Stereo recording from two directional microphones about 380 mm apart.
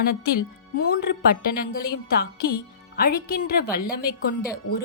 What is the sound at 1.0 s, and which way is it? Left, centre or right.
Speech, left.